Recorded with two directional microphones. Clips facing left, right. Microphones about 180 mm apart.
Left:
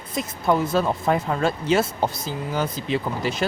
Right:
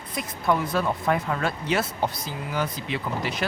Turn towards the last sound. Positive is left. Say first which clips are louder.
# left 4 dB
turn(degrees=30)  # may be behind; listen again after turning